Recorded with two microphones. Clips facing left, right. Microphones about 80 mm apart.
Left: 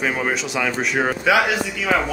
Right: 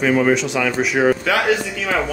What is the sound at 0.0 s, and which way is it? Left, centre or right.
A man's voice, centre.